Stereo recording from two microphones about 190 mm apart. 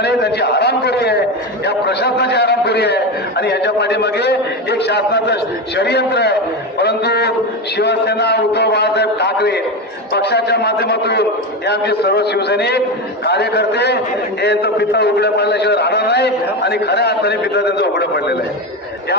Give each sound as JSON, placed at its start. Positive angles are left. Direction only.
{"t": 0.0, "sound": "a man's voice", "side_deg": 60}